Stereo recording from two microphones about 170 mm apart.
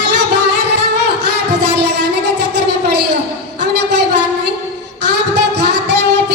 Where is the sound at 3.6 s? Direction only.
90° right.